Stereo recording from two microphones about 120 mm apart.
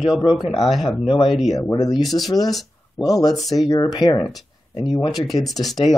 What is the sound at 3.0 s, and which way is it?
Speech, 30° left (ahead or behind).